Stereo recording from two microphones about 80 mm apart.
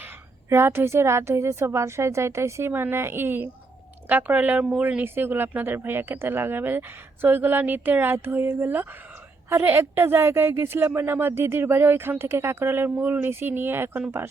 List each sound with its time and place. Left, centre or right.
0.5 s a woman's voice: right